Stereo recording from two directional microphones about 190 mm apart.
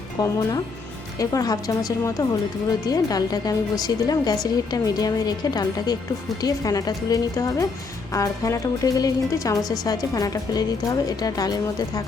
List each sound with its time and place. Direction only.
0.2 s a woman's voice: 20° left (ahead or behind)